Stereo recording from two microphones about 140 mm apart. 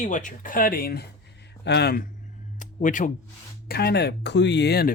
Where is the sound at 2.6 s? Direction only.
65° left (ahead or behind).